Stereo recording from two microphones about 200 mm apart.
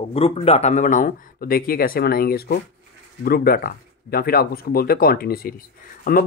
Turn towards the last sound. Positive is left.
turn(degrees=45)  # may be behind; listen again after turning